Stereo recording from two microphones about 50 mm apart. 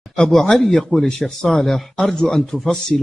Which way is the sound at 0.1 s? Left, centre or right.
Centre.